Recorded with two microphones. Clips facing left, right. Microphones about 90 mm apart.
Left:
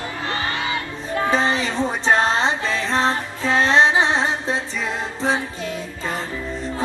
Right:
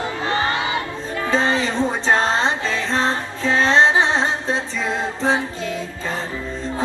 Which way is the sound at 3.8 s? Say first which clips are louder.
Right 1 dB; 20° left (ahead or behind).